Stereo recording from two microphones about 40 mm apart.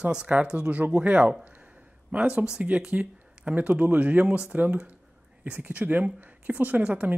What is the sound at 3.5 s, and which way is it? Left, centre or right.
Speech, right.